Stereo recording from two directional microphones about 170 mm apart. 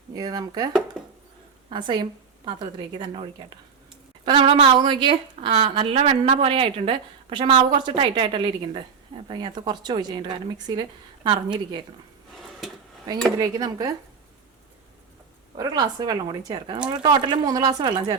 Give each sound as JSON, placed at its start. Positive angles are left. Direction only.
{"t": 0.2, "sound": "speech", "side_deg": -25}
{"t": 0.9, "sound": "a sound", "side_deg": 5}
{"t": 1.7, "sound": "speech", "side_deg": -25}
{"t": 4.3, "sound": "a woman's voice", "side_deg": -30}
{"t": 12.4, "sound": "drawer open or close", "side_deg": 0}
{"t": 13.4, "sound": "speech", "side_deg": -20}
{"t": 15.5, "sound": "speech", "side_deg": -25}